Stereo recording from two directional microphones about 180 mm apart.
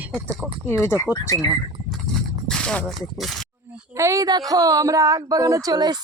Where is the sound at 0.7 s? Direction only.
15° left (ahead or behind).